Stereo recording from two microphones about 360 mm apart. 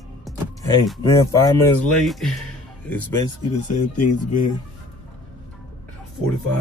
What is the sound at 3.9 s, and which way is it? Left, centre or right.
Speech, left.